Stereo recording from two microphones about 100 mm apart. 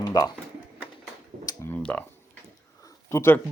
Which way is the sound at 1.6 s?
35° left (ahead or behind).